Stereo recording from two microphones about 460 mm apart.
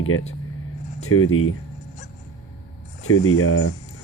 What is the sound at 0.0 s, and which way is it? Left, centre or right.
Speech, left.